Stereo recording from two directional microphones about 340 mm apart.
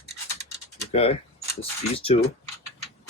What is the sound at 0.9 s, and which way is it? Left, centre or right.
Speech, centre.